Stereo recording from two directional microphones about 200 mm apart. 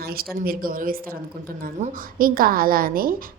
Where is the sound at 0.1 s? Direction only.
50° right (ahead or behind).